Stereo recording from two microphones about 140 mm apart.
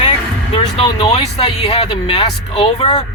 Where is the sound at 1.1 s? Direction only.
50° left (ahead or behind).